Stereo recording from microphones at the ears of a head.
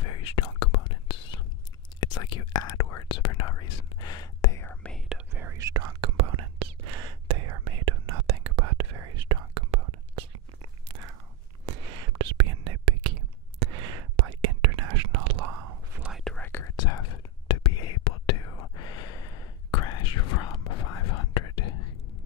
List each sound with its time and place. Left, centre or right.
0.0 s whispering: left
2.0 s speech: left
5.1 s whispering: right
16.4 s whispering: left